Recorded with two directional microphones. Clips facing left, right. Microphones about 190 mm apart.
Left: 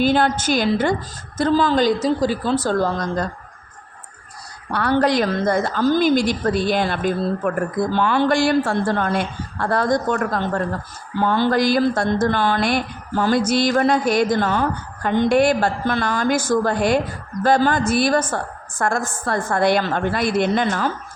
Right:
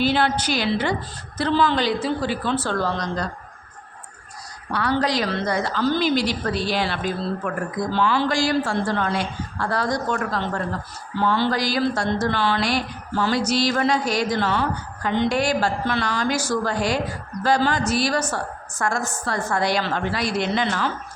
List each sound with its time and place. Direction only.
0.0 s a woman's voice: 45° left (ahead or behind)
4.7 s a woman's voice: 55° left (ahead or behind)